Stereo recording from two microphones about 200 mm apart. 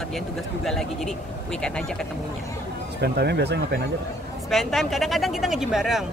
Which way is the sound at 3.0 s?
55° right (ahead or behind).